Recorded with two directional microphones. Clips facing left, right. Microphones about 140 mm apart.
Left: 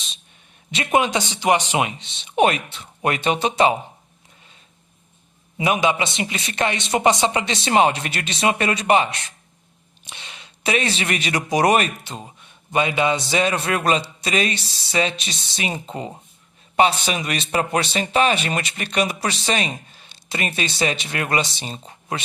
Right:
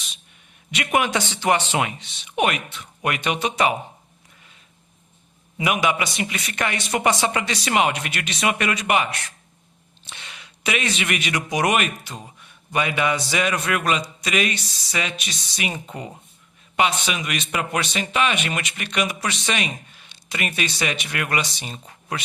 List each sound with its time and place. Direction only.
0.7 s speech: 25° left (ahead or behind)
5.5 s speech: 25° left (ahead or behind)